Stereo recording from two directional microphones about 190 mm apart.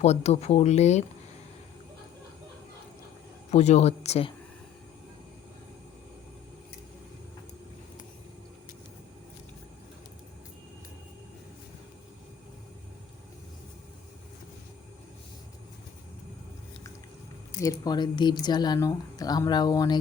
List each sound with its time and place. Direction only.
0.0 s speech: 35° left (ahead or behind)
3.5 s speech: 35° left (ahead or behind)
17.6 s speech: 20° left (ahead or behind)